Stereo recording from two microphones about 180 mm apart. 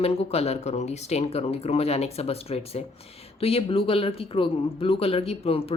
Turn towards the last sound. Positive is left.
turn(degrees=30)  # may be behind; listen again after turning